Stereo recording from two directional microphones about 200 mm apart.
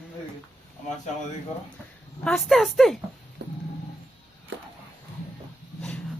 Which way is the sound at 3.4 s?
60° right (ahead or behind).